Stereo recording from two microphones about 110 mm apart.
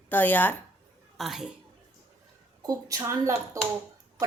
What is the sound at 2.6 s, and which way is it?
Speech, 35° right (ahead or behind).